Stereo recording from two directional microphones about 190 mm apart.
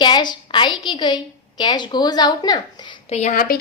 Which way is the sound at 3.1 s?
35° left (ahead or behind).